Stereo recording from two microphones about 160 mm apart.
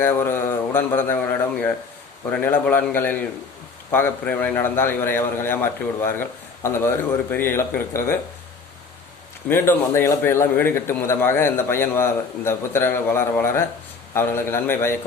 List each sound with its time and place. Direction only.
0.0 s a sound: 15° left (ahead or behind)
2.3 s a man's voice: 10° left (ahead or behind)
9.5 s a man's voice: 15° left (ahead or behind)